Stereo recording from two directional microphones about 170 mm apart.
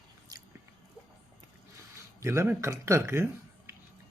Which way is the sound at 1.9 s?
15° right (ahead or behind).